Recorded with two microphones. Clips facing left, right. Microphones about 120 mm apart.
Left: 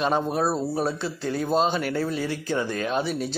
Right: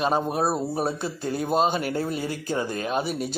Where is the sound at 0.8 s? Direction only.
45° right (ahead or behind).